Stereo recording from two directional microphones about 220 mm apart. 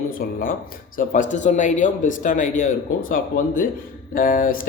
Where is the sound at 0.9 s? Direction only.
35° left (ahead or behind).